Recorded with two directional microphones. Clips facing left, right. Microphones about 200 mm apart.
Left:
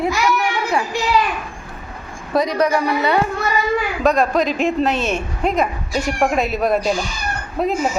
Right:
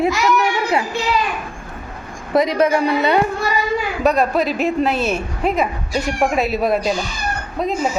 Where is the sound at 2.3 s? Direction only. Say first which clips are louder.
Right 2 dB; 20° right (ahead or behind).